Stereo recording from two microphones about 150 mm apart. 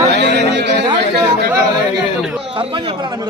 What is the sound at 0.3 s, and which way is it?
Chatter, 90° right.